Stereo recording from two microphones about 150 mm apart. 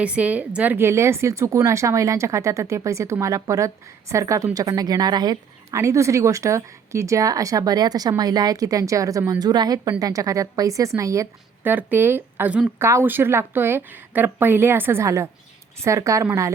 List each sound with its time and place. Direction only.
0.0 s a woman's voice: 10° right (ahead or behind)